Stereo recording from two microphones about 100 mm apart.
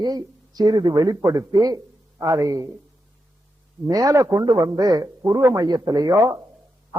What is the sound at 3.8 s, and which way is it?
A man's voice, 35° right (ahead or behind).